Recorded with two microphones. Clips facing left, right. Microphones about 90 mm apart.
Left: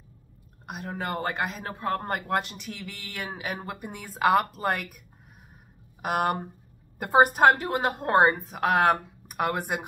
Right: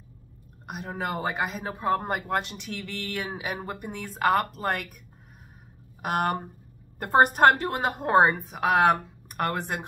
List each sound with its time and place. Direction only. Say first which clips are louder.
0.7 s speech: right 1 dB; centre (ahead or behind)
6.0 s speech: even; centre (ahead or behind)